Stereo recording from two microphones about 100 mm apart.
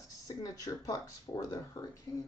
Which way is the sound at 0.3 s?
35° left (ahead or behind).